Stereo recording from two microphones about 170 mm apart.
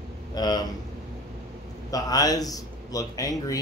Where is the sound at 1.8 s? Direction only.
20° left (ahead or behind).